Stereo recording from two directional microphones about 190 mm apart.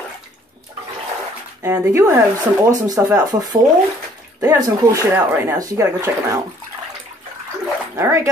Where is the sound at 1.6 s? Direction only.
15° right (ahead or behind).